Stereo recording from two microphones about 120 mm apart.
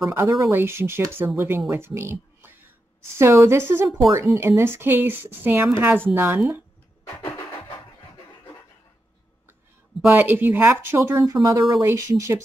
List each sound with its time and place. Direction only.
0.1 s speech: 20° right (ahead or behind)
1.7 s a sound: 20° right (ahead or behind)
3.2 s a woman's voice: 20° right (ahead or behind)
10.0 s speech: 15° right (ahead or behind)